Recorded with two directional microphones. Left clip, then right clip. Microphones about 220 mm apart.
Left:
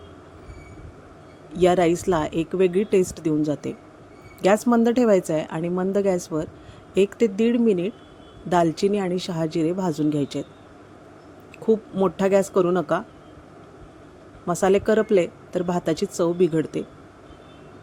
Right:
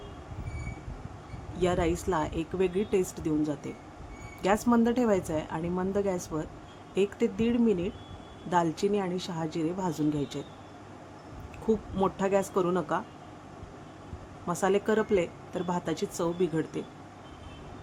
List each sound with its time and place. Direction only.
1.5 s speech: 30° left (ahead or behind)
11.6 s speech: 25° left (ahead or behind)
14.4 s speech: 25° left (ahead or behind)